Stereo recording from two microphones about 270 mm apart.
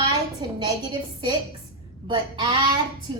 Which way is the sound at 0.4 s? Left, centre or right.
Centre.